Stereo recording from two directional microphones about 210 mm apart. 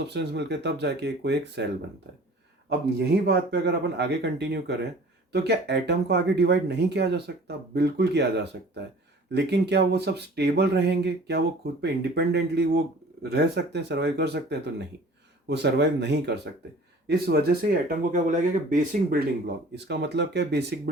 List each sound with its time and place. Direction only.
0.0 s speech: 55° right (ahead or behind)
3.2 s speech: 50° right (ahead or behind)
15.4 s speech: 55° right (ahead or behind); by 19.2 s 40° right (ahead or behind)
19.7 s speech: 55° right (ahead or behind)